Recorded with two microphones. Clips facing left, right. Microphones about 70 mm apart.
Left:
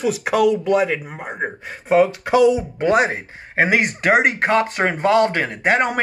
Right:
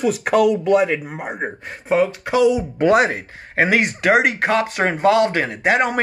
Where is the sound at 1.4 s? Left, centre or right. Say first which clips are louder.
Left 1 dB; centre.